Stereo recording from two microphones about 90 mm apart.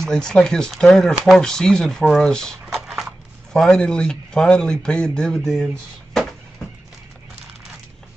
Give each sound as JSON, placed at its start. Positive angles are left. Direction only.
{"t": 0.0, "sound": "speech", "side_deg": 5}